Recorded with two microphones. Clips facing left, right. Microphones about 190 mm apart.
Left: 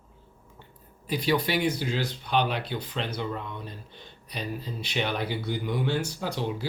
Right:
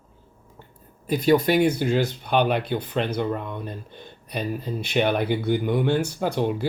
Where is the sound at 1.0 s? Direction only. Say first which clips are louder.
Right 7 dB; 50° right (ahead or behind).